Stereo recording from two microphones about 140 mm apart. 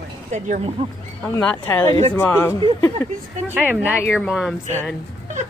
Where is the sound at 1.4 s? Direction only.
15° left (ahead or behind).